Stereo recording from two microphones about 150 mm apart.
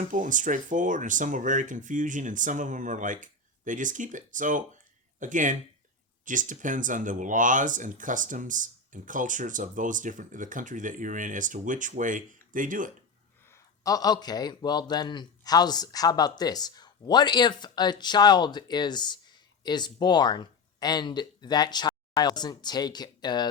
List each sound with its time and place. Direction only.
0.0 s speech: 60° right (ahead or behind)
13.5 s speech: 25° left (ahead or behind)